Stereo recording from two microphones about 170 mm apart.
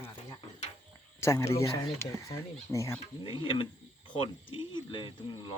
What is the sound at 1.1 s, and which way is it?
Speech, 15° left (ahead or behind).